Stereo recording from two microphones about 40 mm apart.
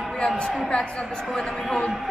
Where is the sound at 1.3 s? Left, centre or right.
Centre.